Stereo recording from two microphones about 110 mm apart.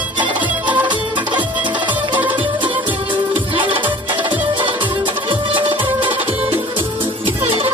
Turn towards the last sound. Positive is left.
turn(degrees=-50)  # may be behind; listen again after turning